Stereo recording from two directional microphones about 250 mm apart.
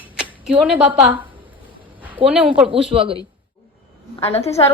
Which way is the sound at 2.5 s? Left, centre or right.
Centre.